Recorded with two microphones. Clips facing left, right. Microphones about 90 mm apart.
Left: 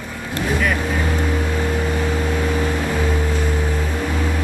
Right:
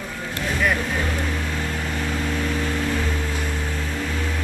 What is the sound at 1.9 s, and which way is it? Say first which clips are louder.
Boat: left 4 dB; 15° left (ahead or behind).